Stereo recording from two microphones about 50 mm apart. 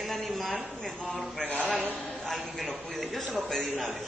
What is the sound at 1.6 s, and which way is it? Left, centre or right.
Speech, right.